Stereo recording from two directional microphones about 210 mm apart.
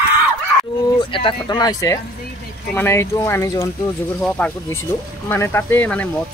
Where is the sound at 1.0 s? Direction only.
25° left (ahead or behind).